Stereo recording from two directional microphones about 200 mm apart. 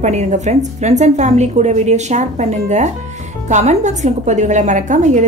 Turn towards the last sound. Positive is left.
turn(degrees=-35)  # may be behind; listen again after turning